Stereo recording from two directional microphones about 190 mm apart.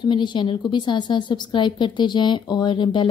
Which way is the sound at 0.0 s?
25° left (ahead or behind).